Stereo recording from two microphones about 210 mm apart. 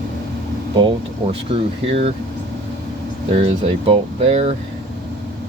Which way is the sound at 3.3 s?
25° right (ahead or behind).